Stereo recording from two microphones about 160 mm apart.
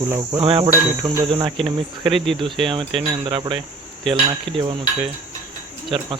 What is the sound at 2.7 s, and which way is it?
Cricket, 30° right (ahead or behind).